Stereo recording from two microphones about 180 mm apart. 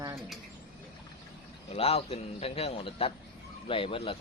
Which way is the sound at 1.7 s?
35° left (ahead or behind).